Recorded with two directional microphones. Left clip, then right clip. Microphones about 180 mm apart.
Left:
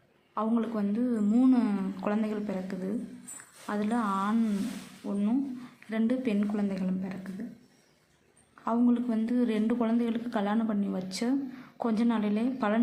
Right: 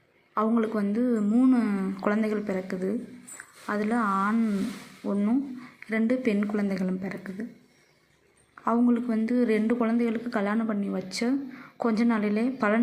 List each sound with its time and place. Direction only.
0.3 s speech: 10° right (ahead or behind)
1.3 s speech: centre (ahead or behind)
8.6 s speech: 15° right (ahead or behind)